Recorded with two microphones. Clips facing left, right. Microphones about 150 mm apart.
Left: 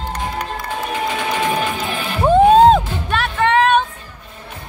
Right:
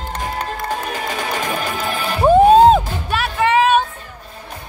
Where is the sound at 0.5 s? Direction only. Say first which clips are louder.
Even; 40° right (ahead or behind).